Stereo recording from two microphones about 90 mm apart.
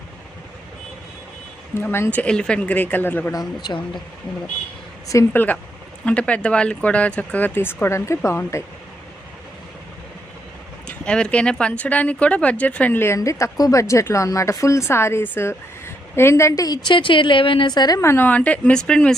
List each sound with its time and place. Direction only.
1.7 s a woman's voice: 25° left (ahead or behind)
2.0 s speech: 15° left (ahead or behind)
3.3 s a woman's voice: 55° left (ahead or behind)
5.3 s a woman's voice: 20° left (ahead or behind)
10.8 s speech: 10° left (ahead or behind)
13.1 s a woman's voice: 40° left (ahead or behind); by 17.7 s 70° left (ahead or behind)
17.7 s a woman's voice: 50° left (ahead or behind)
18.0 s a woman's voice: 30° left (ahead or behind)
18.3 s speech: 15° left (ahead or behind)